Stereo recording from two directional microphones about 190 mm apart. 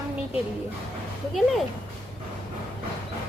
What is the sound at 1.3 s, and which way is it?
Speech, centre (ahead or behind).